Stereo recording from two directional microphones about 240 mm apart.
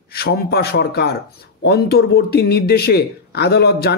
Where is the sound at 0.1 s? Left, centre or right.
Left.